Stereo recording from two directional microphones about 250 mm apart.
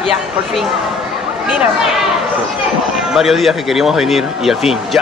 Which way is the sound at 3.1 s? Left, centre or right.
Centre.